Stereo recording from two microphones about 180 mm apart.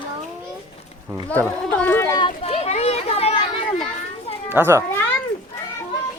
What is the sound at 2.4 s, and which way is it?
Children playing, 35° left (ahead or behind).